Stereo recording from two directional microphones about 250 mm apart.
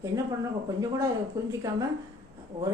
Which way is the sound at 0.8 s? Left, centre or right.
Centre.